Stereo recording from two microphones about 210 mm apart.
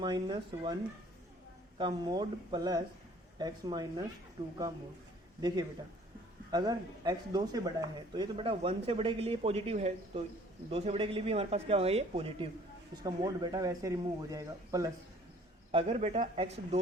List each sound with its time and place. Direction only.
0.0 s speech: 20° right (ahead or behind)
1.8 s speech: 20° right (ahead or behind)
15.7 s speech: 30° right (ahead or behind)